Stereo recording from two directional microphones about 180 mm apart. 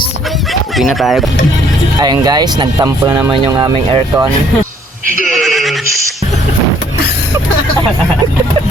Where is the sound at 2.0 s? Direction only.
20° right (ahead or behind).